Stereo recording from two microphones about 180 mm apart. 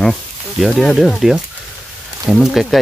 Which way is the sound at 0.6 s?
Centre (ahead or behind).